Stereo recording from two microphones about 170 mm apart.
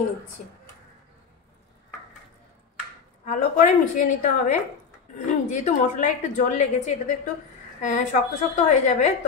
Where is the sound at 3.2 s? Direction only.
45° left (ahead or behind).